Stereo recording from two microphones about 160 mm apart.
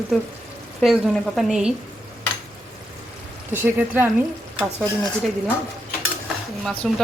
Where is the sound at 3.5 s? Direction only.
10° right (ahead or behind).